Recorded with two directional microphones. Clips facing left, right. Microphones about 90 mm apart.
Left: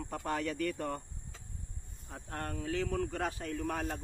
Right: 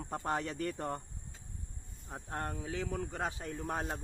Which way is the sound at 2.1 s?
20° right (ahead or behind).